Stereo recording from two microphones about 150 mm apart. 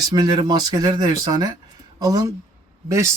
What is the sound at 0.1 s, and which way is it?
Speech, 25° right (ahead or behind).